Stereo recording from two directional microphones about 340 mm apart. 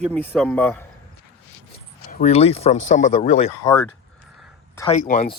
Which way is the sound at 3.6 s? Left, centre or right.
Centre.